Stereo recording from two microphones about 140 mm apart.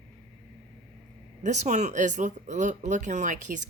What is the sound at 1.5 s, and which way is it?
Speech, 55° right (ahead or behind).